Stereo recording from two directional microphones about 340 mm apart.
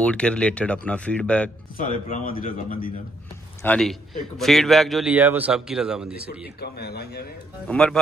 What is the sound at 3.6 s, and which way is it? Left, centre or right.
A man's voice, centre.